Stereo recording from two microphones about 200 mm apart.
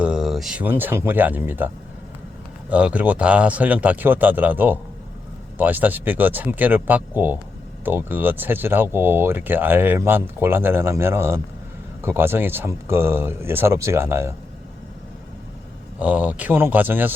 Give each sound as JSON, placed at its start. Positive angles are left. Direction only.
{"t": 0.0, "sound": "speech", "side_deg": -5}
{"t": 16.0, "sound": "speech", "side_deg": -5}